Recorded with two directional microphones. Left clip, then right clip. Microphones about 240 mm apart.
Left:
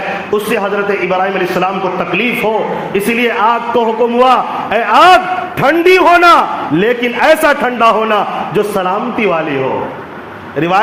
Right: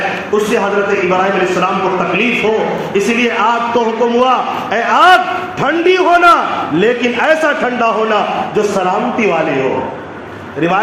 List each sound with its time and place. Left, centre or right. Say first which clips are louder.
2.9 s a man's voice: left 1 dB; left